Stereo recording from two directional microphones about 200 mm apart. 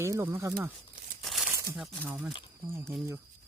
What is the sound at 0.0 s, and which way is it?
Speech, 15° right (ahead or behind).